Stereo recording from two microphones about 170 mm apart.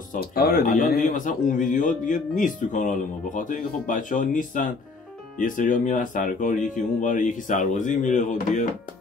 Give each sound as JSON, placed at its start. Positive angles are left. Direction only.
{"t": 0.1, "sound": "speech", "side_deg": 65}